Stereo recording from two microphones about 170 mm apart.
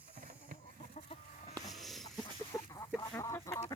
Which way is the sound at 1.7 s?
Centre (ahead or behind).